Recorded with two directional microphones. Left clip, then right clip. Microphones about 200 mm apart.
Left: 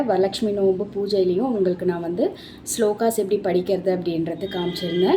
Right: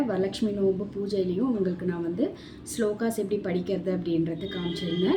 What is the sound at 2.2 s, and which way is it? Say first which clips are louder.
A woman's voice: left 7 dB; 20° right (ahead or behind).